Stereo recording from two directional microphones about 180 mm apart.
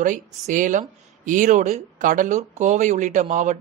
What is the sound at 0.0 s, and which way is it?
Speech, 45° right (ahead or behind).